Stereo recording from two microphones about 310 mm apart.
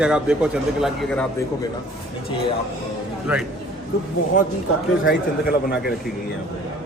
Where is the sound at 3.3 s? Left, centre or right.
Centre.